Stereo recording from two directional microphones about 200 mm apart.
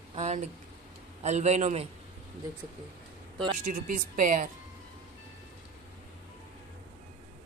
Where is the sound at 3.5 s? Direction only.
40° right (ahead or behind).